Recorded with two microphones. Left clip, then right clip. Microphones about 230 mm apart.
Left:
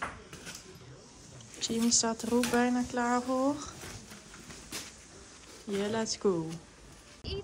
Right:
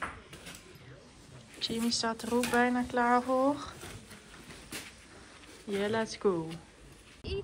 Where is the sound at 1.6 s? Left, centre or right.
Centre.